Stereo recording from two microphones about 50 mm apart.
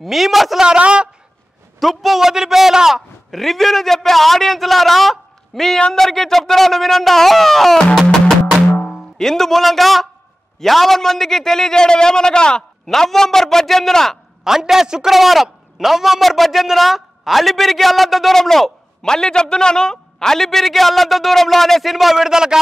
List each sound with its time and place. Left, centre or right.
0.0 s a man's voice: centre
0.7 s speech: right
1.8 s a man's voice: centre
3.3 s a man's voice: centre
7.9 s music: centre
8.8 s a man's voice: centre
14.4 s a man's voice: centre
21.9 s a man's voice: centre